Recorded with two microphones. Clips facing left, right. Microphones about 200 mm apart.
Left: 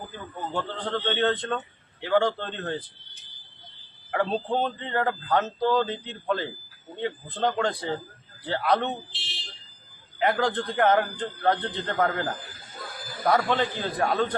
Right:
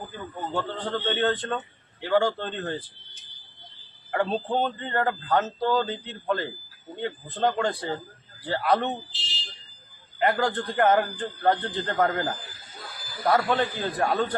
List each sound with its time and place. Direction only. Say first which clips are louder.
0.5 s a man's voice: even; centre (ahead or behind)
4.1 s a man's voice: even; centre (ahead or behind)
9.1 s fire alarm: right 2 dB; 60° left (ahead or behind)
10.2 s a man's voice: even; 5° right (ahead or behind)
13.0 s a sound: left 2 dB; 50° left (ahead or behind)
13.2 s a man's voice: even; centre (ahead or behind)